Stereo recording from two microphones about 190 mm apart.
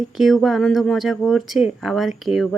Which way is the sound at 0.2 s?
Centre (ahead or behind).